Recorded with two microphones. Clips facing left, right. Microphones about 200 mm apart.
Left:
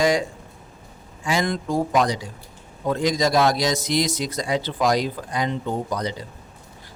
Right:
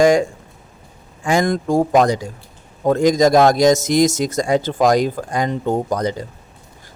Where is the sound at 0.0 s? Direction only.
50° right (ahead or behind).